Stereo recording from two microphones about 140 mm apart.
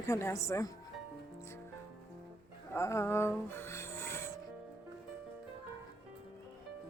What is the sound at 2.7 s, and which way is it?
Music, 20° left (ahead or behind).